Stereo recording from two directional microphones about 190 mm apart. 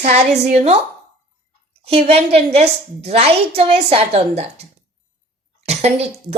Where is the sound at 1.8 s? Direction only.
30° right (ahead or behind).